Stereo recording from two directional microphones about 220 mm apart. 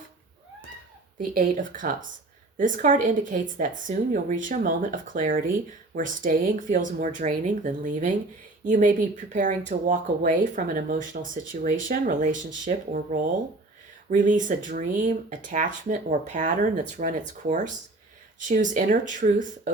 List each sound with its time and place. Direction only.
1.2 s speech: 35° right (ahead or behind)